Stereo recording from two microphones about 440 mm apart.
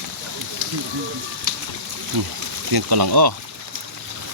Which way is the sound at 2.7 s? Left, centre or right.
Right.